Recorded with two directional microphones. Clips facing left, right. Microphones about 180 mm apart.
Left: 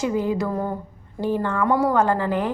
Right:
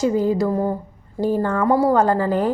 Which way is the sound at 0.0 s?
35° right (ahead or behind).